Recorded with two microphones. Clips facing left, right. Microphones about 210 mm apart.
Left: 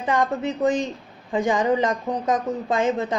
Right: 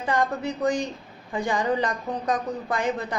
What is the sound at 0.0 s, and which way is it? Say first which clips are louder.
A man's voice: left 3 dB; 15° left (ahead or behind).